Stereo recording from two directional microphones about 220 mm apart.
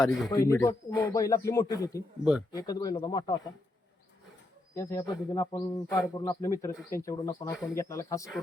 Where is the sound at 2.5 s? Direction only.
15° left (ahead or behind).